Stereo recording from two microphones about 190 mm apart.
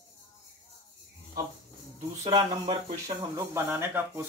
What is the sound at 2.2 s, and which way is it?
Speech, 20° right (ahead or behind).